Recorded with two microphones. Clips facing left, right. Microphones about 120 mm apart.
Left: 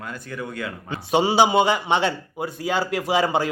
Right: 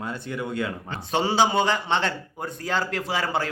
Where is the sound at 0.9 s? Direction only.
15° left (ahead or behind).